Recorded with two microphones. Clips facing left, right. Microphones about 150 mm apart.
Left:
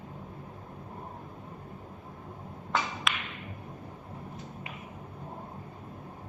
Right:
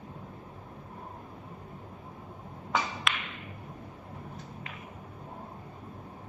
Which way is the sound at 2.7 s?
Centre (ahead or behind).